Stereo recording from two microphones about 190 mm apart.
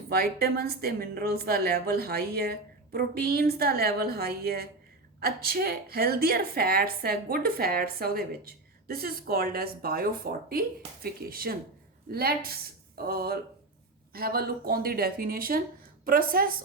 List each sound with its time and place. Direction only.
0.1 s a woman's voice: 55° right (ahead or behind)